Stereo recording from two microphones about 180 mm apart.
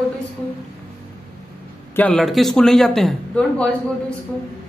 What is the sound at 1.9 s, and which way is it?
A woman's voice, 5° left (ahead or behind).